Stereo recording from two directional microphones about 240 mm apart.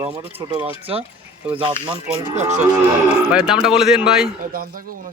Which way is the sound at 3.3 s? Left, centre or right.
Centre.